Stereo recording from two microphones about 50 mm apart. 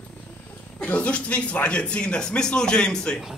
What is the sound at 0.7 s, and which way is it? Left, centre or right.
Speech, left.